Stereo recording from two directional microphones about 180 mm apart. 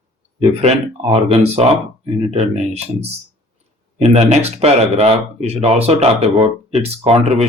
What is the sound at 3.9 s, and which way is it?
Speech, 35° right (ahead or behind).